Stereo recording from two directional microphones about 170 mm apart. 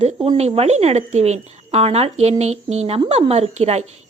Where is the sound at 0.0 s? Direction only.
40° right (ahead or behind).